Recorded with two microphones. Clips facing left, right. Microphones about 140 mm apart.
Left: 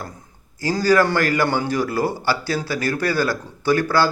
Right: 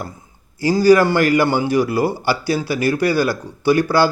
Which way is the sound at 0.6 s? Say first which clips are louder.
Right 5 dB; 15° right (ahead or behind).